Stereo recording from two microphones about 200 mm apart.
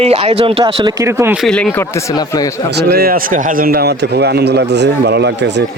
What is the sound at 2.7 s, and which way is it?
A man's voice, 50° right (ahead or behind).